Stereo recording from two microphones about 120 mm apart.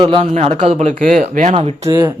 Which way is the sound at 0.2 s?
75° right (ahead or behind).